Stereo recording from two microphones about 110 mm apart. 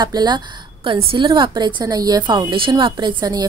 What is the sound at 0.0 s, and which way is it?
A woman's voice, 40° right (ahead or behind).